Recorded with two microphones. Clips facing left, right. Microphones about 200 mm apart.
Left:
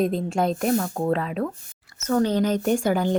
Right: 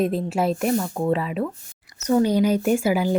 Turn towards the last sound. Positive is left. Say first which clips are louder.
# right 1 dB
turn(degrees=-5)  # may be behind; listen again after turning